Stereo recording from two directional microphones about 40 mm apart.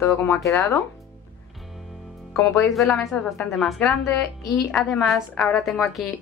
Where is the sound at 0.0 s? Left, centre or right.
Left.